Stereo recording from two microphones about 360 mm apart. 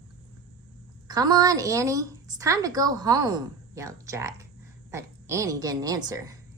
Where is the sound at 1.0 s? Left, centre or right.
Centre.